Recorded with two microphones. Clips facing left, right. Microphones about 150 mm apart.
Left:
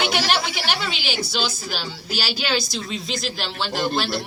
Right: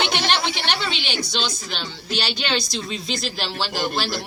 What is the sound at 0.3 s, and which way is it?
Speech, 5° left (ahead or behind).